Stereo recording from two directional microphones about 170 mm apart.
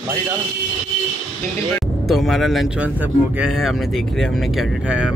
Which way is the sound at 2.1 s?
Centre (ahead or behind).